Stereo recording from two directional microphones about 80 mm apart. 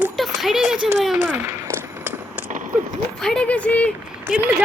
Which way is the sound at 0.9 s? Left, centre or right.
Centre.